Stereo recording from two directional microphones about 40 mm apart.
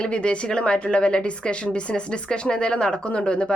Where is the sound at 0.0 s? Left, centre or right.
Left.